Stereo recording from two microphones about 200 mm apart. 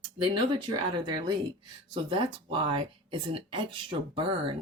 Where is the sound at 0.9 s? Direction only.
20° right (ahead or behind).